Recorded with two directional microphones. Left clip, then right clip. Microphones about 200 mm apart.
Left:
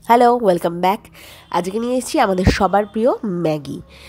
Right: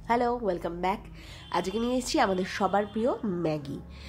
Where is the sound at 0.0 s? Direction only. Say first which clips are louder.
Left 14 dB; 45° left (ahead or behind).